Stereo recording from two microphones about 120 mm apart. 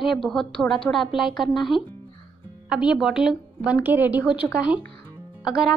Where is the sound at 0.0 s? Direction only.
Centre (ahead or behind).